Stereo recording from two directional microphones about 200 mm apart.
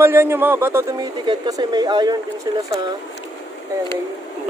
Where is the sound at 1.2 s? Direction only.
20° right (ahead or behind).